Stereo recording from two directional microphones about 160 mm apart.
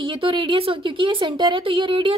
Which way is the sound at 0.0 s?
30° right (ahead or behind).